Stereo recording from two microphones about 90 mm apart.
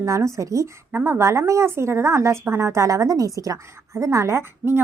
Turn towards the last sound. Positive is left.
turn(degrees=-30)  # may be behind; listen again after turning